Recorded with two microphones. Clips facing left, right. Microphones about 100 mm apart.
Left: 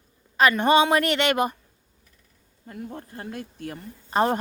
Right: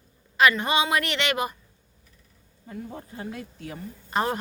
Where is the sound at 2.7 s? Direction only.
60° left (ahead or behind).